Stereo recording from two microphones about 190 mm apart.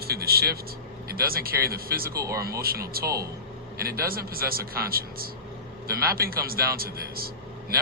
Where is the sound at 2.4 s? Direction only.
55° right (ahead or behind).